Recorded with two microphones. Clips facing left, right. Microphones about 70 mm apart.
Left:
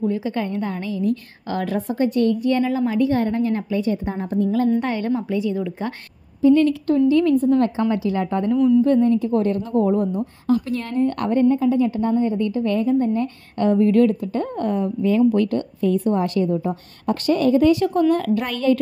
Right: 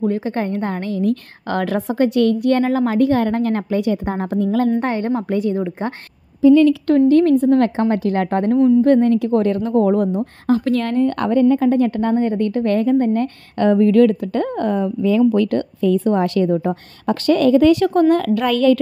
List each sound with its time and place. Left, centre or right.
0.2 s a woman's voice: right
2.6 s a woman's voice: right
4.7 s a woman's voice: right
5.3 s speech: right
5.6 s a woman's voice: right
6.4 s a woman's voice: right
7.0 s speech: right
7.3 s a woman's voice: right
7.8 s a woman's voice: right